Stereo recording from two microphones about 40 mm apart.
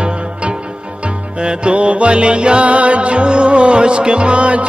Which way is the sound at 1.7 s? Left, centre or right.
Right.